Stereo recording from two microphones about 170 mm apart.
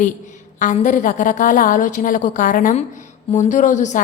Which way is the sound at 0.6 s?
50° left (ahead or behind).